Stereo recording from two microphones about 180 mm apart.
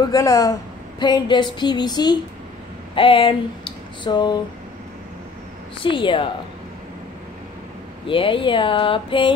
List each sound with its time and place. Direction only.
0.0 s a woman's voice: 20° left (ahead or behind)
5.8 s a woman's voice: 30° left (ahead or behind)
8.1 s a woman's voice: 30° left (ahead or behind)